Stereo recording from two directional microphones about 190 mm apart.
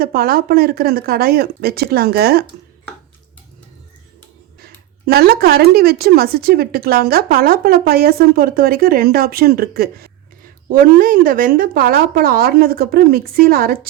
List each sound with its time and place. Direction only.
0.0 s speech: 50° right (ahead or behind)
5.0 s speech: 55° right (ahead or behind)